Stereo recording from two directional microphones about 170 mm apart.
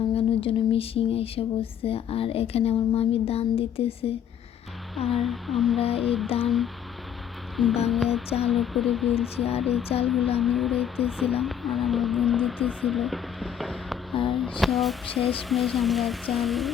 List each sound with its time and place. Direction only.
0.1 s a sound: 35° left (ahead or behind)
4.9 s speech: centre (ahead or behind)
7.5 s speech: centre (ahead or behind)